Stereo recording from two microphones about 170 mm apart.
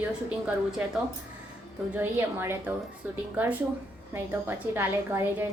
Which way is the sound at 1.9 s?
10° right (ahead or behind).